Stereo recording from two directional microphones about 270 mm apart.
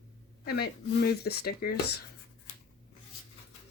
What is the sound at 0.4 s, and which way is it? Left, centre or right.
Speech, left.